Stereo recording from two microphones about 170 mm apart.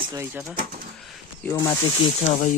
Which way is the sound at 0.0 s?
20° right (ahead or behind).